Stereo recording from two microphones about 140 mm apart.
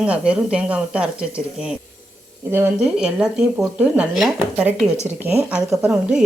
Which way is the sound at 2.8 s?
5° right (ahead or behind).